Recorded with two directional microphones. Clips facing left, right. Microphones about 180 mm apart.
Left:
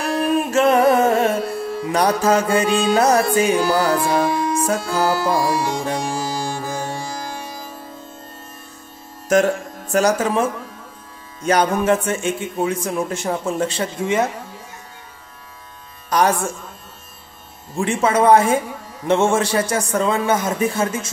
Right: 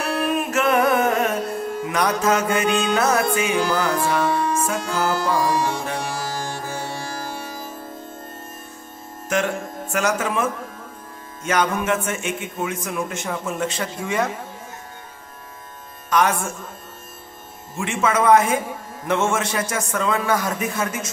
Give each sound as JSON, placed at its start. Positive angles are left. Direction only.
{"t": 0.1, "sound": "music", "side_deg": 30}
{"t": 1.9, "sound": "speech", "side_deg": 35}
{"t": 4.3, "sound": "music", "side_deg": 10}
{"t": 4.6, "sound": "speech", "side_deg": 35}
{"t": 5.4, "sound": "music", "side_deg": 10}
{"t": 9.3, "sound": "speech", "side_deg": 40}
{"t": 16.1, "sound": "speech", "side_deg": 35}
{"t": 17.7, "sound": "a man's voice", "side_deg": 35}